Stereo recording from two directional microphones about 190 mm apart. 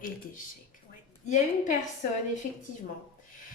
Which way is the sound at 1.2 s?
40° left (ahead or behind).